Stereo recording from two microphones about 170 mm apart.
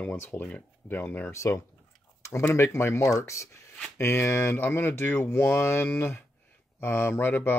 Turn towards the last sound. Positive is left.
turn(degrees=10)  # may be behind; listen again after turning